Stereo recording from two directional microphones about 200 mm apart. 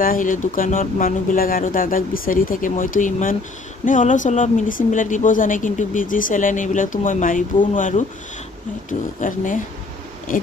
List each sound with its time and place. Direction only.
0.0 s speech: 45° left (ahead or behind)
9.2 s speech: 40° left (ahead or behind)